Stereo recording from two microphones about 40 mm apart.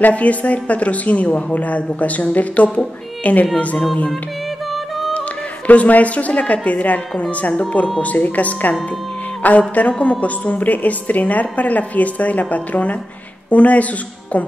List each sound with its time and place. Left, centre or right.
0.0 s a woman's voice: left
5.7 s a woman's voice: left